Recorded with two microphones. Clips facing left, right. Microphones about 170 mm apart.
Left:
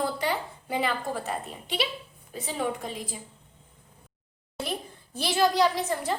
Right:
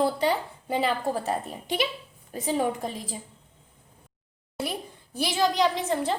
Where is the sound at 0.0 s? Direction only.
30° right (ahead or behind).